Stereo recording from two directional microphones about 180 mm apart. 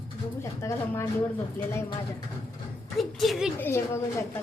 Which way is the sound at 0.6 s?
15° left (ahead or behind).